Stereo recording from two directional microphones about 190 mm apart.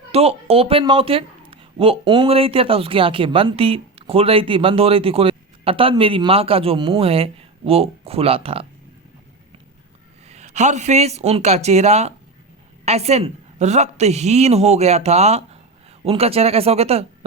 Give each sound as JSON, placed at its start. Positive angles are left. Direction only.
{"t": 0.1, "sound": "speech", "side_deg": -30}
{"t": 10.2, "sound": "a woman's voice", "side_deg": -35}